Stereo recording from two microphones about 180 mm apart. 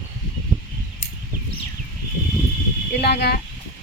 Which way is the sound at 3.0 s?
65° left (ahead or behind).